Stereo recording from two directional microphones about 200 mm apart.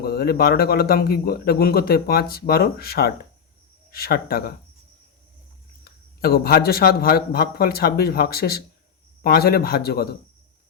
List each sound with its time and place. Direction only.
0.0 s speech: 50° left (ahead or behind)
5.8 s speech: 50° left (ahead or behind)